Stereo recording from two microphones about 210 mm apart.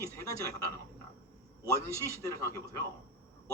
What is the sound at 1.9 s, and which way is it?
Speech, 15° left (ahead or behind).